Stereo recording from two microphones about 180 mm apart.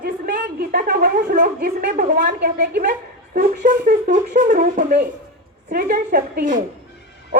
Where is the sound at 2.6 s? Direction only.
50° right (ahead or behind).